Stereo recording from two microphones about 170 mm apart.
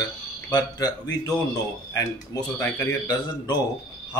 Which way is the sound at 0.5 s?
25° left (ahead or behind).